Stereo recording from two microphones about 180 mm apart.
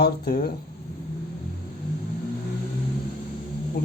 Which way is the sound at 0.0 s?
55° left (ahead or behind).